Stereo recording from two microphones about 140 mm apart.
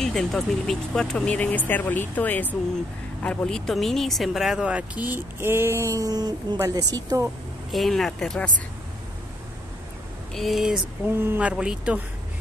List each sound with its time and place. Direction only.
0.0 s a woman's voice: 5° left (ahead or behind); by 7.2 s 25° right (ahead or behind)
7.7 s speech: centre (ahead or behind)
10.3 s speech: centre (ahead or behind)
11.1 s speech: 15° right (ahead or behind)